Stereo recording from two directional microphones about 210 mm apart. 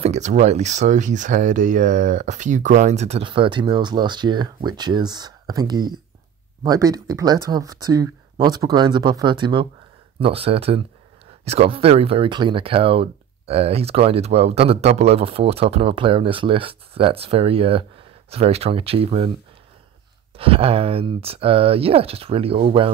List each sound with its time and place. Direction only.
0.0 s speech: 35° right (ahead or behind)
20.3 s speech: 25° right (ahead or behind)